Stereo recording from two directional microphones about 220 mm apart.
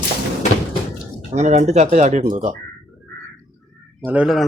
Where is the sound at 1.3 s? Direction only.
30° right (ahead or behind).